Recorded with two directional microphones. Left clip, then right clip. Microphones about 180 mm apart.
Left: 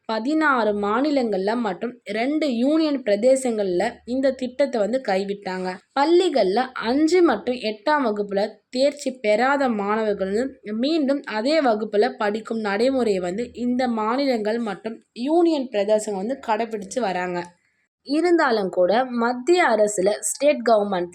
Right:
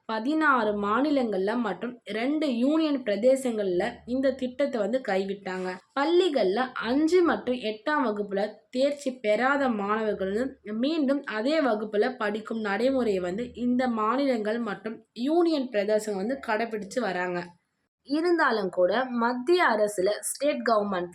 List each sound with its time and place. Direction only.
0.1 s speech: 30° left (ahead or behind)